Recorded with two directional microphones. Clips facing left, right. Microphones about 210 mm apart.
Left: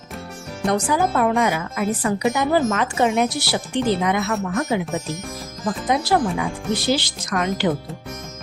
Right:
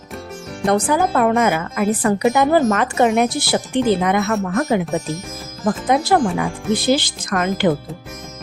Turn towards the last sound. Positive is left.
turn(degrees=-55)  # may be behind; listen again after turning